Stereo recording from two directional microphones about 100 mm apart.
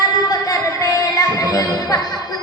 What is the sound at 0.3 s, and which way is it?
Music, 35° left (ahead or behind).